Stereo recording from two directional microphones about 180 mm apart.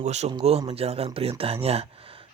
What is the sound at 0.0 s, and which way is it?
Speech, 40° right (ahead or behind).